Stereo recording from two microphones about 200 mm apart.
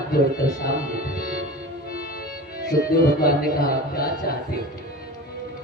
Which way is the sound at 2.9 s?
45° left (ahead or behind).